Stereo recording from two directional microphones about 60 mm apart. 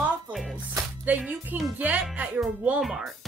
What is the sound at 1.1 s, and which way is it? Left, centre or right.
Speech, right.